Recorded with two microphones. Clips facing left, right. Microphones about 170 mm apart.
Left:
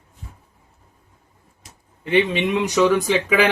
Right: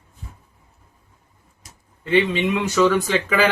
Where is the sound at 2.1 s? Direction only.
15° left (ahead or behind).